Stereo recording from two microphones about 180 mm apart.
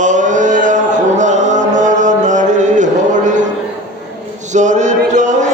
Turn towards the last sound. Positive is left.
turn(degrees=-40)  # may be behind; listen again after turning